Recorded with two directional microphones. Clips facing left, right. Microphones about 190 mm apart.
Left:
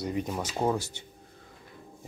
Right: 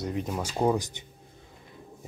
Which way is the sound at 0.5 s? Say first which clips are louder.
Right 3 dB; 15° right (ahead or behind).